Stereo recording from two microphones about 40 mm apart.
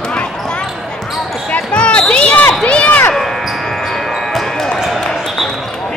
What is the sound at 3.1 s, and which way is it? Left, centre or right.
Basketball bounce, centre.